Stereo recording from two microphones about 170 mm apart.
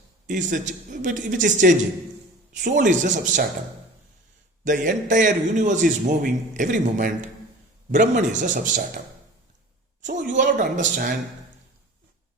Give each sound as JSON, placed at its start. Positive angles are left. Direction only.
{"t": 0.3, "sound": "a man's voice", "side_deg": -50}
{"t": 4.6, "sound": "a man's voice", "side_deg": -50}
{"t": 10.0, "sound": "a man's voice", "side_deg": -45}